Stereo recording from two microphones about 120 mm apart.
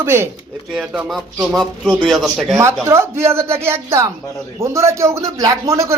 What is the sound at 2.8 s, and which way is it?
Speech, 20° right (ahead or behind).